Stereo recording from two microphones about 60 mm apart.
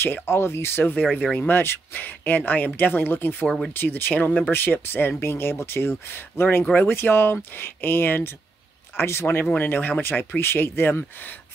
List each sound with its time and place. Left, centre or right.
0.0 s speech: left
1.1 s speech: left
1.5 s speech: left
3.4 s speech: centre
3.7 s speech: left
9.4 s speech: left